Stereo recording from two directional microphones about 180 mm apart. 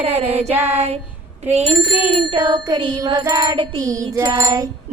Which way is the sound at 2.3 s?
25° right (ahead or behind).